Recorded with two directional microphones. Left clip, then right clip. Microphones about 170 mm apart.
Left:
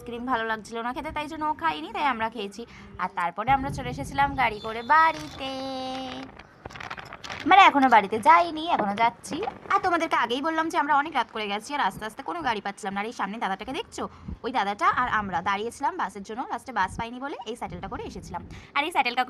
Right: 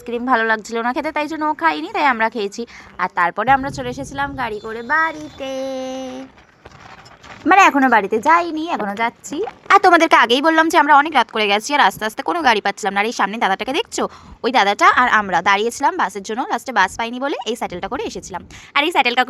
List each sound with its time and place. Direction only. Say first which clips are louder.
0.0 s a woman's voice: right 11 dB; 35° right (ahead or behind)
4.9 s a sound: right 1 dB; 10° right (ahead or behind)
7.4 s a woman's voice: right 5 dB; 25° right (ahead or behind)
9.6 s a woman's voice: right 13 dB; 40° right (ahead or behind)